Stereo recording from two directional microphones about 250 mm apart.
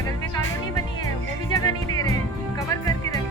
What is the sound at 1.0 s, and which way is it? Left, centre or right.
Music, centre.